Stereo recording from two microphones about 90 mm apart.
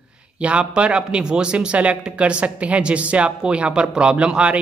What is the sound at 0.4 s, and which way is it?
Speech, 15° right (ahead or behind).